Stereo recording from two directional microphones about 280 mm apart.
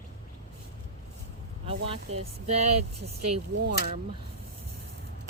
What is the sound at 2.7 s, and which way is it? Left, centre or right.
Speech, right.